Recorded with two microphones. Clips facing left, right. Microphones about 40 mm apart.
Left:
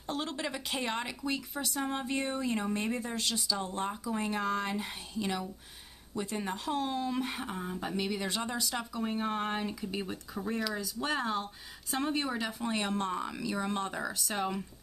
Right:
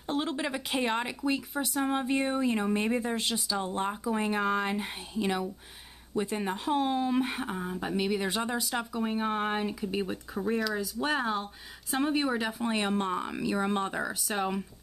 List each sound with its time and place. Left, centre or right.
0.0 s speech: centre